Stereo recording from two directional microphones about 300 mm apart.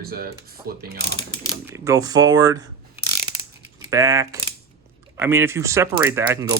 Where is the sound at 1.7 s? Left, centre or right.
Centre.